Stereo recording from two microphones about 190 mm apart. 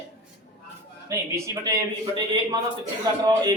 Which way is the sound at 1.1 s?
15° right (ahead or behind).